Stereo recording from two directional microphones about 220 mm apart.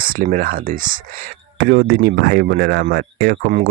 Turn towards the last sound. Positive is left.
turn(degrees=-40)  # may be behind; listen again after turning